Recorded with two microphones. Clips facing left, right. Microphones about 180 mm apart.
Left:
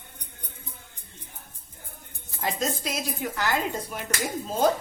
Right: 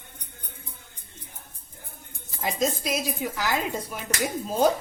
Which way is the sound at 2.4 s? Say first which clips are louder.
Right 2 dB; 10° right (ahead or behind).